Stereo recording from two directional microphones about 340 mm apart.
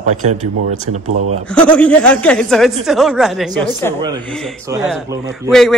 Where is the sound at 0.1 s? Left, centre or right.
Right.